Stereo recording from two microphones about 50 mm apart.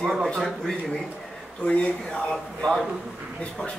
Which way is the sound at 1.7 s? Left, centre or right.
Centre.